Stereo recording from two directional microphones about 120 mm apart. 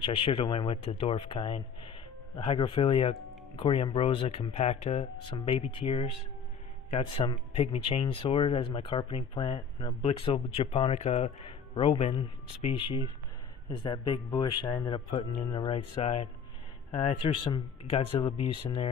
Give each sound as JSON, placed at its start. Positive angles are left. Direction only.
{"t": 0.0, "sound": "speech", "side_deg": 50}
{"t": 7.2, "sound": "speech", "side_deg": 40}
{"t": 7.5, "sound": "speech", "side_deg": 55}
{"t": 13.7, "sound": "speech", "side_deg": 35}
{"t": 15.9, "sound": "speech", "side_deg": 50}